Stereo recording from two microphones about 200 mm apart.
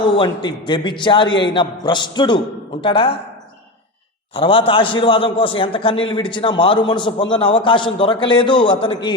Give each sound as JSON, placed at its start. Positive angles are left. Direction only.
{"t": 0.0, "sound": "a man's voice", "side_deg": 25}
{"t": 4.4, "sound": "a man's voice", "side_deg": 25}